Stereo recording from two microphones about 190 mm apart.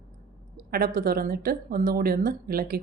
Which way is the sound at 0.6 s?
50° right (ahead or behind).